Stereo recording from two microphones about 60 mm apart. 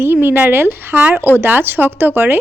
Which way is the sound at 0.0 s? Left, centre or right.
Right.